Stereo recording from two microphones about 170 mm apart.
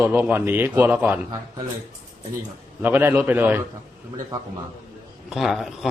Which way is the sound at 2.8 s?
10° right (ahead or behind).